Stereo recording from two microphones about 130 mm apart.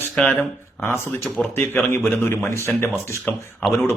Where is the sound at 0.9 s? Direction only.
20° left (ahead or behind).